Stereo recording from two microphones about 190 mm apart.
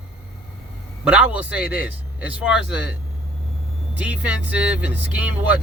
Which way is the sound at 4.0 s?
5° right (ahead or behind).